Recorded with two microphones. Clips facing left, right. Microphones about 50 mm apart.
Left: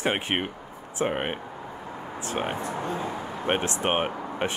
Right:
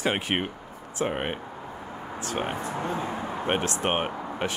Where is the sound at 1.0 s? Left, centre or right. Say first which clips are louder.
Left 1 dB; centre.